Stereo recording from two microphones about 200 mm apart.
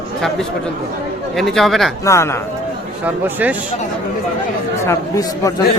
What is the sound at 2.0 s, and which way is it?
Speech, 15° left (ahead or behind).